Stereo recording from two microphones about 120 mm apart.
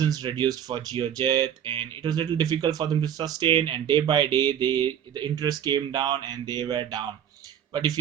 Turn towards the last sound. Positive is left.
turn(degrees=-35)  # may be behind; listen again after turning